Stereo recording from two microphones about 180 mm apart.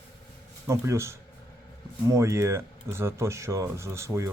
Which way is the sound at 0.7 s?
15° right (ahead or behind).